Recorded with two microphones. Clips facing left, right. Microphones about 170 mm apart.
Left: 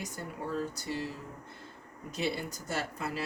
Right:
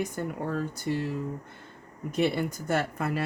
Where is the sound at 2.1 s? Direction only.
60° right (ahead or behind).